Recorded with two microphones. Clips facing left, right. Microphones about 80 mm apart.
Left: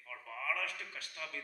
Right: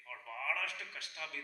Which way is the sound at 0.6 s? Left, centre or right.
Left.